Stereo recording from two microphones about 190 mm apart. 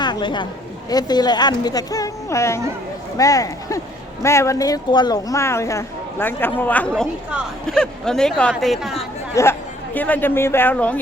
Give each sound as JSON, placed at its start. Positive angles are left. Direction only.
{"t": 0.0, "sound": "chatter", "side_deg": 25}
{"t": 0.9, "sound": "speech", "side_deg": 20}
{"t": 9.3, "sound": "speech", "side_deg": 15}